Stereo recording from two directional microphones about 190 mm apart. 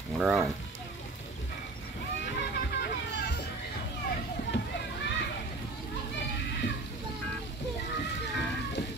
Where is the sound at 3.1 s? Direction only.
60° left (ahead or behind).